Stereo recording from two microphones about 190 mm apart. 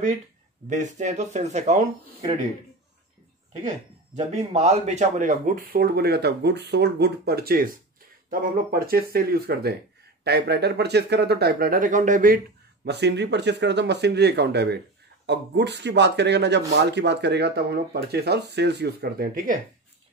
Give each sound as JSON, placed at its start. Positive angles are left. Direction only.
{"t": 0.7, "sound": "speech", "side_deg": -40}
{"t": 4.1, "sound": "speech", "side_deg": -35}
{"t": 12.8, "sound": "speech", "side_deg": -65}